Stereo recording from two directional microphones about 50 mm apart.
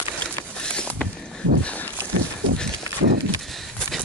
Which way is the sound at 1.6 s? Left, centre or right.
Left.